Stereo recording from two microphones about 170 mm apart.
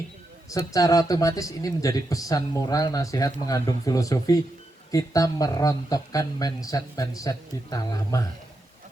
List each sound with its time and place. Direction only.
0.5 s speech: 20° left (ahead or behind)